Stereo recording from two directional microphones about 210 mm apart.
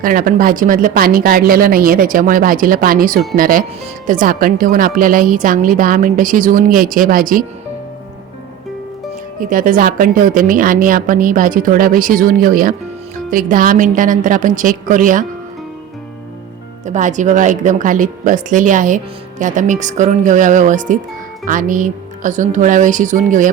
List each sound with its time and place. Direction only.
0.0 s a woman's voice: 40° right (ahead or behind)
9.4 s a woman's voice: 40° right (ahead or behind)
16.8 s a woman's voice: 35° right (ahead or behind)